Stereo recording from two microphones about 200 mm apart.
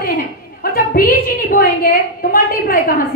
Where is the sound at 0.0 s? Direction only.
45° left (ahead or behind).